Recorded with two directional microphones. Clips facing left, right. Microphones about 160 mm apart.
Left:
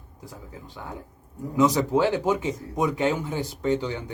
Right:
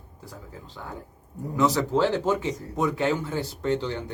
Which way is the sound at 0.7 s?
15° left (ahead or behind).